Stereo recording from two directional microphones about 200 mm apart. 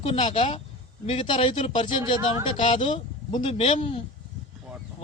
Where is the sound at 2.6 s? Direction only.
25° left (ahead or behind).